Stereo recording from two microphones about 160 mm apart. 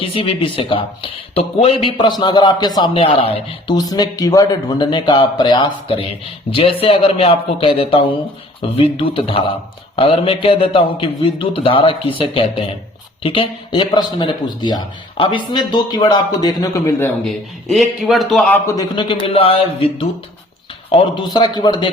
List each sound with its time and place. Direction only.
0.0 s speech: 35° left (ahead or behind)
3.8 s speech: 25° left (ahead or behind)
17.2 s a man's voice: centre (ahead or behind)
18.8 s speech: 30° left (ahead or behind)